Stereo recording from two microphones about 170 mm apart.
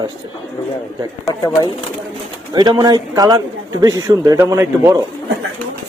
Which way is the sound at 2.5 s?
25° right (ahead or behind).